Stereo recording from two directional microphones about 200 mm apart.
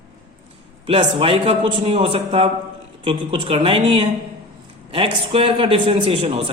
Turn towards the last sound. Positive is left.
turn(degrees=-30)  # may be behind; listen again after turning